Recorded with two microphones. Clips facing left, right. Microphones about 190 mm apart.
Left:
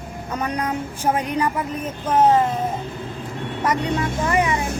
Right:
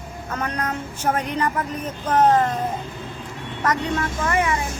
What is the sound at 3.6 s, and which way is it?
Speech, 10° left (ahead or behind).